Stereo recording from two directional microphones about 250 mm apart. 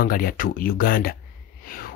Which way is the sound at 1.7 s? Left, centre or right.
Left.